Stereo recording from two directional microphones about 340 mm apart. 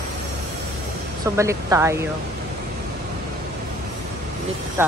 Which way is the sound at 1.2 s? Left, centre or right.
Centre.